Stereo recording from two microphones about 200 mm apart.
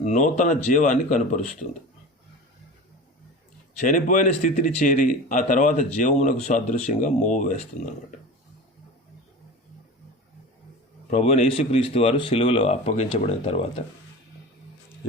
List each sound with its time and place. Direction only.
0.0 s speech: 35° left (ahead or behind)
3.8 s speech: 40° left (ahead or behind)
11.1 s speech: 30° left (ahead or behind)